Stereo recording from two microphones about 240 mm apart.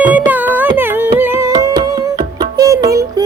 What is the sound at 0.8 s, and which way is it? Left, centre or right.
Carnatic music, centre.